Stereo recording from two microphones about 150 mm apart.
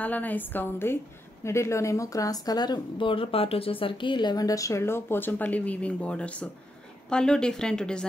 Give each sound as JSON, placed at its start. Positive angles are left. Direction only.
{"t": 0.0, "sound": "a woman's voice", "side_deg": 10}